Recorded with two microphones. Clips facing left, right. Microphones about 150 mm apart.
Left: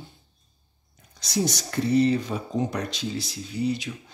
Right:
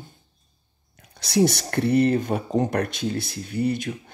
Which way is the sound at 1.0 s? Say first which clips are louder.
Right 7 dB; 65° right (ahead or behind).